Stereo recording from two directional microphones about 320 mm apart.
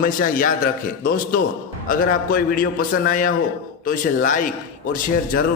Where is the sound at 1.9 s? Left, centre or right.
Left.